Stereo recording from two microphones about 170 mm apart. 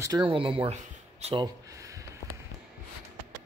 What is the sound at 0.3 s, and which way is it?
Speech, 30° right (ahead or behind).